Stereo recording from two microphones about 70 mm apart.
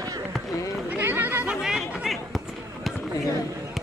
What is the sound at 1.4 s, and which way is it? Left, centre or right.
Chatter, centre.